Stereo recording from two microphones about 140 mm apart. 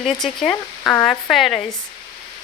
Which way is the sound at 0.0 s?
5° left (ahead or behind).